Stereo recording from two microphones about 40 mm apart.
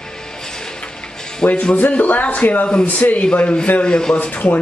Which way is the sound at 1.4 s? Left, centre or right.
Left.